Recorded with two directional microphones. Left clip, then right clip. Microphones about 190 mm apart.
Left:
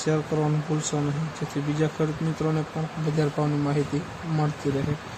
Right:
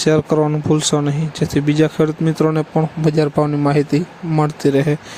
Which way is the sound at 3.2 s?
55° right (ahead or behind).